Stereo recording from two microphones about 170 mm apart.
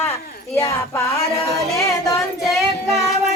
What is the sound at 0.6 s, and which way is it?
Music, 15° left (ahead or behind).